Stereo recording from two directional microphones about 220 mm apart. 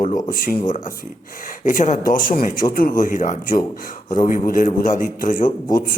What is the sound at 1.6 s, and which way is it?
Speech, 35° left (ahead or behind).